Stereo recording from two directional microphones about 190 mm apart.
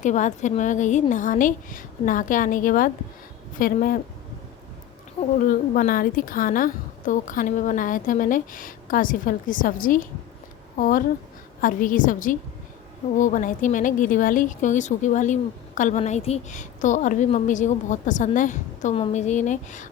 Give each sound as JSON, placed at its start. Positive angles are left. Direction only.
{"t": 0.0, "sound": "a woman's voice", "side_deg": 40}
{"t": 5.5, "sound": "a woman's voice", "side_deg": 45}